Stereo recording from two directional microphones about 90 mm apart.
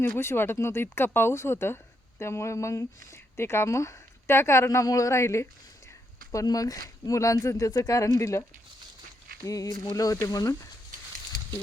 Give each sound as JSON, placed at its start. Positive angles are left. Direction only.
{"t": 0.2, "sound": "speech", "side_deg": 25}